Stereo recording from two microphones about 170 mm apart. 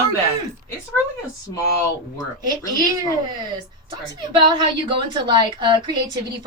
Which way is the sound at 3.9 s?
30° right (ahead or behind).